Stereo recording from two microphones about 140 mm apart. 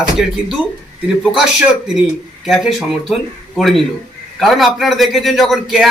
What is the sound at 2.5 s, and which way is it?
A man's voice, centre (ahead or behind).